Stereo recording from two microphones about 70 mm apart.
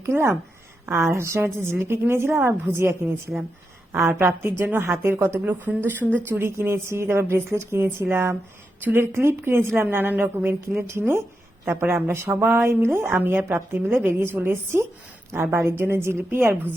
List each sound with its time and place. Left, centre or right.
0.0 s a woman's voice: right
4.2 s a woman's voice: right